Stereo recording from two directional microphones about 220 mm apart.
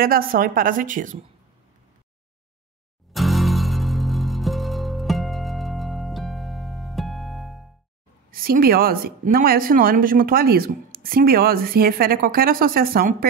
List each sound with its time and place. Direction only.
0.0 s a woman's voice: 40° right (ahead or behind)
3.1 s music: centre (ahead or behind)
8.3 s a woman's voice: 40° right (ahead or behind)